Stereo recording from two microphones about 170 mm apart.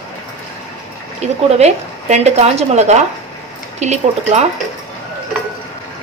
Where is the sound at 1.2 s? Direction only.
40° right (ahead or behind).